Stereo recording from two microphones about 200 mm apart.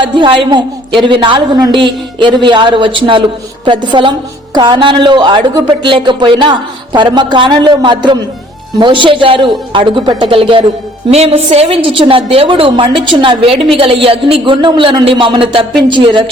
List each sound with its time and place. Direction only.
0.0 s speech: 25° right (ahead or behind)